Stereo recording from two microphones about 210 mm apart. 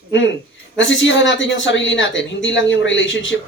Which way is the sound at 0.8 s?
60° left (ahead or behind).